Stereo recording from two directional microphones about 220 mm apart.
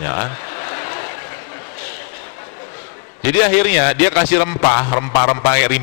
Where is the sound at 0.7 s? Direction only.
25° left (ahead or behind).